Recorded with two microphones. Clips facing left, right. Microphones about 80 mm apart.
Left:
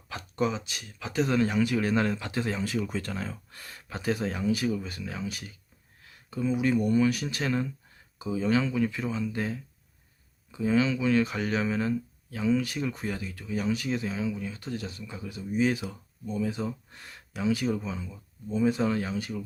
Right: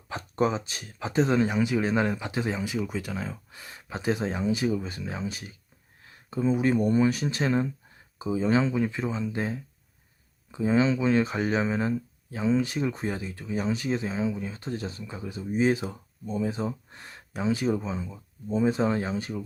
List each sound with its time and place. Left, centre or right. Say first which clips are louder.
0.1 s speech: right 3 dB; right